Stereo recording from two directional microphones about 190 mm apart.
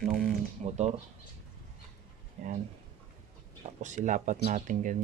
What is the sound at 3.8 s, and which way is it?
Speech, 40° right (ahead or behind).